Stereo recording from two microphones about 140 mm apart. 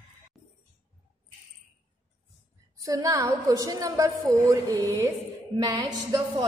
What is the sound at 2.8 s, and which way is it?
A woman's voice, 25° right (ahead or behind).